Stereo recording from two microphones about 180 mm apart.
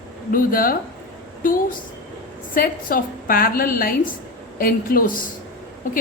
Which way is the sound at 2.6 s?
55° left (ahead or behind).